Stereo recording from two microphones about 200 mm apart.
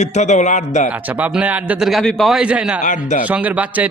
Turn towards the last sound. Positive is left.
turn(degrees=-5)  # may be behind; listen again after turning